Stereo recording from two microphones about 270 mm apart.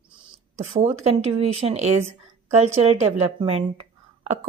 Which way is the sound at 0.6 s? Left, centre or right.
Right.